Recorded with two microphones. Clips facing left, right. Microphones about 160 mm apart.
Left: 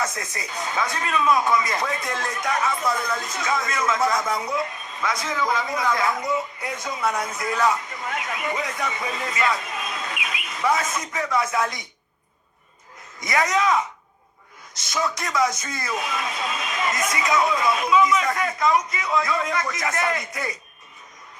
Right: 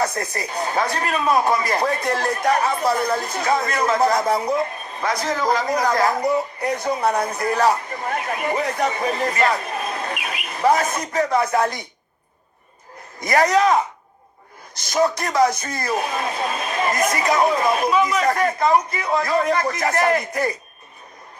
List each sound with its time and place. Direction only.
0.0 s speech: 35° right (ahead or behind)
9.6 s bird: 35° right (ahead or behind)
10.6 s speech: 35° right (ahead or behind)
13.2 s speech: 35° right (ahead or behind)
14.8 s speech: 40° right (ahead or behind)